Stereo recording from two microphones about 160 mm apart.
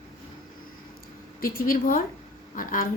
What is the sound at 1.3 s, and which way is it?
A woman's voice, 65° left (ahead or behind).